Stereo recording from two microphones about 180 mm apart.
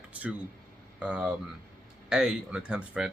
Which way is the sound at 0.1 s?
10° right (ahead or behind).